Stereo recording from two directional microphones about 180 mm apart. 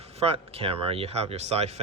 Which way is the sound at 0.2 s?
30° right (ahead or behind).